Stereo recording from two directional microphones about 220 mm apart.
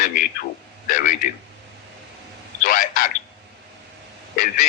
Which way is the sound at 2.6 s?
40° left (ahead or behind).